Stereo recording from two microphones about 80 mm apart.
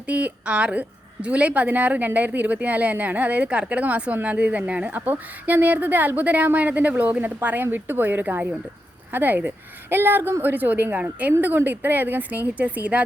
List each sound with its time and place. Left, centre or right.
0.1 s a woman's voice: centre